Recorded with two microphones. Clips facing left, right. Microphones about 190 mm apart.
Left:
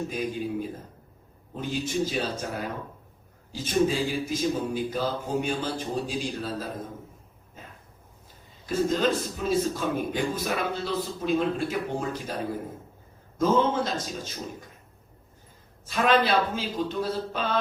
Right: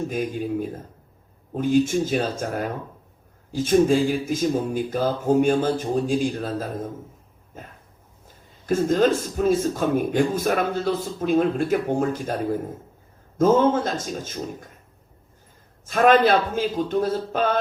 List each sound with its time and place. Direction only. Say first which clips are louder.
1.5 s a man's voice: right 9 dB; 50° right (ahead or behind)
3.5 s a man's voice: right 7 dB; 50° right (ahead or behind)
8.6 s a man's voice: right 5 dB; 50° right (ahead or behind)
15.9 s a man's voice: right 6 dB; 50° right (ahead or behind)